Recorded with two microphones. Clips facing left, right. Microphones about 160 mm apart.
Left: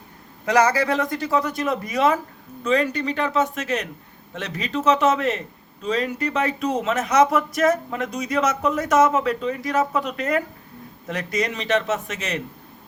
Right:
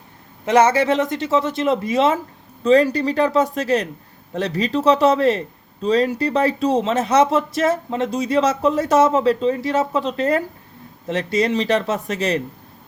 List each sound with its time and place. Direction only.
0.4 s speech: 25° right (ahead or behind)